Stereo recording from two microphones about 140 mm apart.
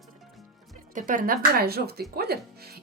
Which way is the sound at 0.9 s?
75° right (ahead or behind).